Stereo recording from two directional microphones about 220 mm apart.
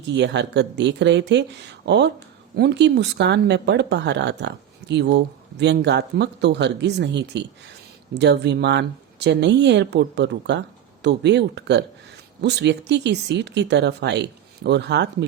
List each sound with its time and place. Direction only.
0.1 s speech: 50° right (ahead or behind)